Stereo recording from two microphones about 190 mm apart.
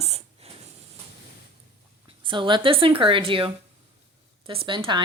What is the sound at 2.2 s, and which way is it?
Speech, 25° right (ahead or behind).